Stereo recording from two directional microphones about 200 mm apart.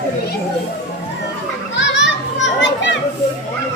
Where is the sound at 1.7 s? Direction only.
65° left (ahead or behind).